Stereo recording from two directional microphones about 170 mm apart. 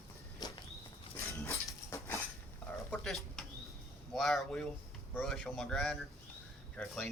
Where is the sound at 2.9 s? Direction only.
Centre (ahead or behind).